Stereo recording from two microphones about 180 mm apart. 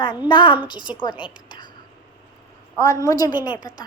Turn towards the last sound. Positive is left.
turn(degrees=20)  # may be behind; listen again after turning